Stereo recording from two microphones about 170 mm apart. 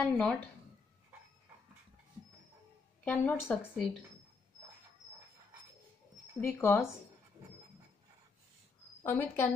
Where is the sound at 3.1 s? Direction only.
10° left (ahead or behind).